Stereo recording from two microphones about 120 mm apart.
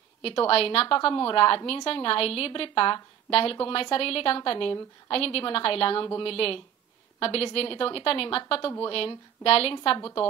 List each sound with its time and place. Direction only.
0.2 s a woman's voice: 50° left (ahead or behind)